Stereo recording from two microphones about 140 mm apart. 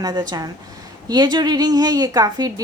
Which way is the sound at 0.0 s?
30° right (ahead or behind).